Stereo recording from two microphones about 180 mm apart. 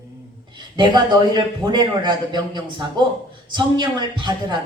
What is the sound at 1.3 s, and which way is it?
A man's voice, 25° right (ahead or behind).